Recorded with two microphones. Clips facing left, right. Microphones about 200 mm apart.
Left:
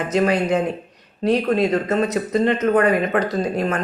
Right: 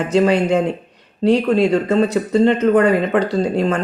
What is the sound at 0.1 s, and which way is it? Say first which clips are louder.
Speech: right 4 dB; 30° right (ahead or behind).